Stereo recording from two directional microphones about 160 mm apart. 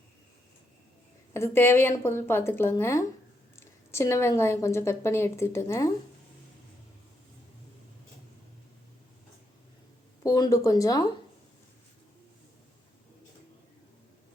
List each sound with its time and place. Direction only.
1.3 s a woman's voice: 15° left (ahead or behind)
10.2 s speech: 20° left (ahead or behind)